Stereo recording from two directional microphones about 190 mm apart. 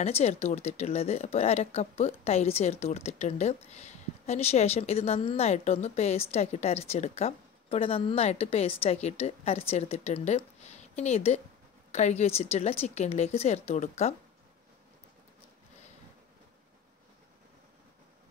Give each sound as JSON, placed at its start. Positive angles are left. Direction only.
{"t": 0.0, "sound": "speech", "side_deg": 35}